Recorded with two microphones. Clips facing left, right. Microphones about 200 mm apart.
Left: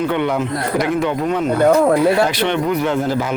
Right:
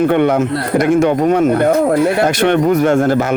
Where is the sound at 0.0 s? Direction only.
50° right (ahead or behind).